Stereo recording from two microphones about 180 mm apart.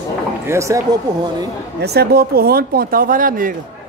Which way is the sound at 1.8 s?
60° right (ahead or behind).